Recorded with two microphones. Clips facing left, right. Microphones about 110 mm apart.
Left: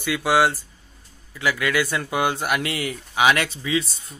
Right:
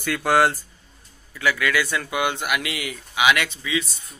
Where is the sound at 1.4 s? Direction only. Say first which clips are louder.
Even; 20° left (ahead or behind).